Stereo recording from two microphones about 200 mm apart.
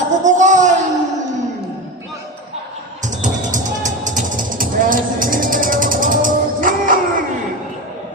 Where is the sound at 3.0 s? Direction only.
40° right (ahead or behind).